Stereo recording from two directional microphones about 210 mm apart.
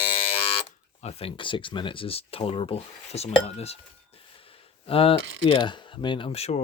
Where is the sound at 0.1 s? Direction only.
25° left (ahead or behind).